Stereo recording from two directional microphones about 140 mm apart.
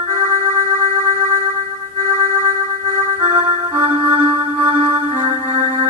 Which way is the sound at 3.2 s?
40° right (ahead or behind).